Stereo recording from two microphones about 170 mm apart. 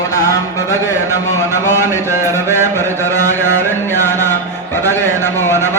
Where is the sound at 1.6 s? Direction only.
15° left (ahead or behind).